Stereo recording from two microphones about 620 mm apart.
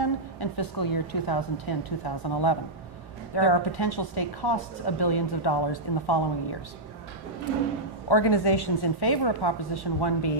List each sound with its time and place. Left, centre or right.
0.0 s a woman's voice: left
8.1 s a woman's voice: left